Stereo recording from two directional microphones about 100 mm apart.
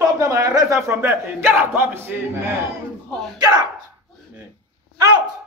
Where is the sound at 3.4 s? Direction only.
40° right (ahead or behind).